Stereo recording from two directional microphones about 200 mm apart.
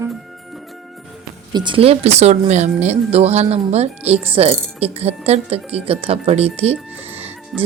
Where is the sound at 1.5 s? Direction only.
20° right (ahead or behind).